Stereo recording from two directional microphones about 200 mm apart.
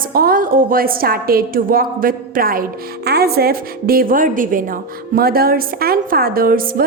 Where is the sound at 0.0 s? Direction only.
45° right (ahead or behind).